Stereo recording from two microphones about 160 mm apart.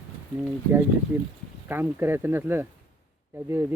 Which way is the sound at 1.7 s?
15° right (ahead or behind).